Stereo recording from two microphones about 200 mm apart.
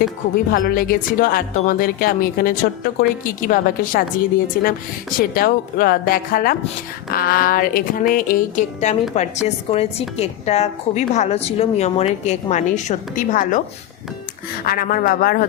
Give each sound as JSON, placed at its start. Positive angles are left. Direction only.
{"t": 0.5, "sound": "a woman's voice", "side_deg": 45}
{"t": 14.6, "sound": "a woman's voice", "side_deg": 45}